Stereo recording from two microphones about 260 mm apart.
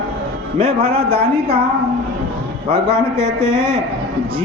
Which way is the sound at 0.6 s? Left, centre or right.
Right.